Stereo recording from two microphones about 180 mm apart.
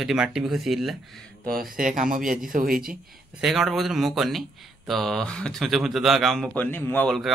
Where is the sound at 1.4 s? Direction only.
50° right (ahead or behind).